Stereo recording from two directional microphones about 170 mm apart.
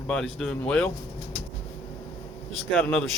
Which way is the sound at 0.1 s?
Centre (ahead or behind).